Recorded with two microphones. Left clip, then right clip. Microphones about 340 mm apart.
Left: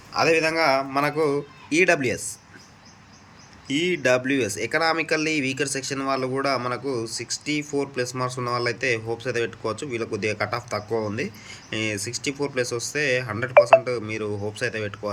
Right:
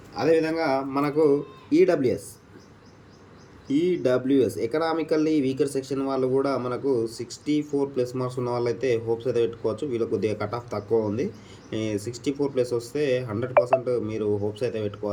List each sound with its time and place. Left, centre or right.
0.2 s speech: centre
1.1 s speech: left
1.7 s speech: centre
3.7 s speech: centre
4.7 s speech: left
4.9 s speech: centre